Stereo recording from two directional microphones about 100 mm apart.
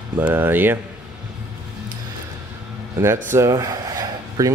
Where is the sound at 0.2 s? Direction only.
20° right (ahead or behind).